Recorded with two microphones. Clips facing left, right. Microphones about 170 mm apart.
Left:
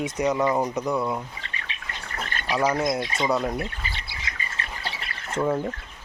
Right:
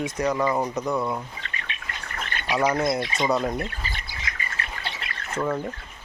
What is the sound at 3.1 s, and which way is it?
Speech, centre (ahead or behind).